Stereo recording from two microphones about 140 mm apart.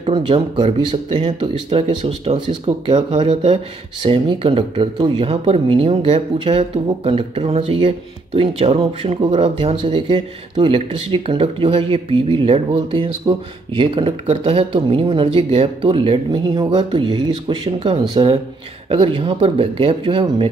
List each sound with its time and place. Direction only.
0.0 s speech: 40° right (ahead or behind)